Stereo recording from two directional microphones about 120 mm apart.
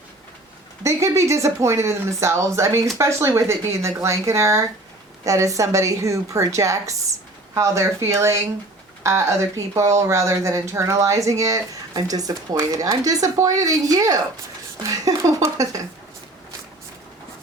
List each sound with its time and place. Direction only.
0.9 s speech: 25° right (ahead or behind)